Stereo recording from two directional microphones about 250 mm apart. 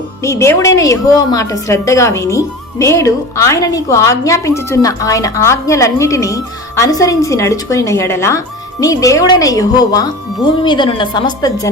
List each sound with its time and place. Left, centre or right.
0.2 s a woman's voice: centre